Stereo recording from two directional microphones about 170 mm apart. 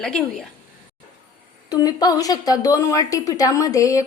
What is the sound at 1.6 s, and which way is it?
A woman's voice, 25° left (ahead or behind).